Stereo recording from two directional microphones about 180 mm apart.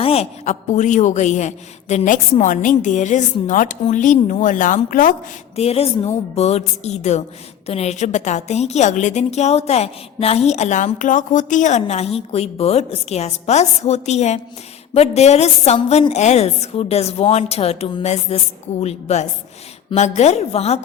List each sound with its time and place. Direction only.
0.0 s a woman's voice: 35° left (ahead or behind); by 5.1 s 50° left (ahead or behind)
5.5 s a woman's voice: 35° left (ahead or behind)